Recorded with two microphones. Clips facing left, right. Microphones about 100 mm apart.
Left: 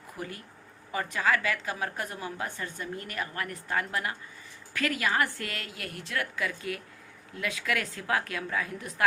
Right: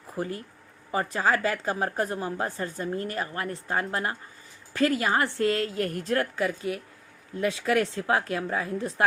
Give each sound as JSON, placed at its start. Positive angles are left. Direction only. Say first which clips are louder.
{"t": 0.2, "sound": "a woman's voice", "louder": "right 8 dB", "side_deg": -30}